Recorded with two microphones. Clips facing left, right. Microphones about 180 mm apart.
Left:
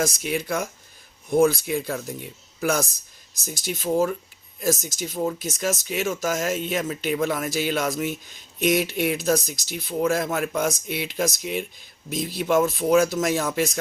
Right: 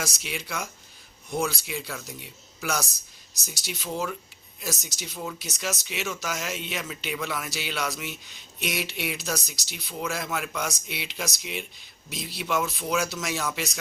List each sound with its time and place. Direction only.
0.0 s speech: 50° left (ahead or behind)